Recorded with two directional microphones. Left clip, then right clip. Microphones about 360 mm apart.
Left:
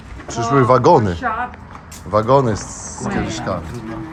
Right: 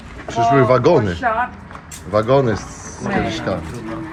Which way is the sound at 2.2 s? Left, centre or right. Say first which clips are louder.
Left 2 dB; centre.